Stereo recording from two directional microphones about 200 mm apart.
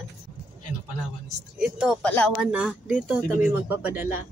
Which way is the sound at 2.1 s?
10° left (ahead or behind).